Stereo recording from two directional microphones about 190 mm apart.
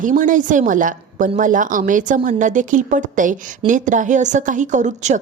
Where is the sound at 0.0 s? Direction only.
45° right (ahead or behind).